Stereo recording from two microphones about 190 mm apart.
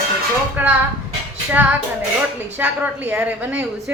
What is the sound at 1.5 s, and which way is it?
A woman's voice, 10° right (ahead or behind).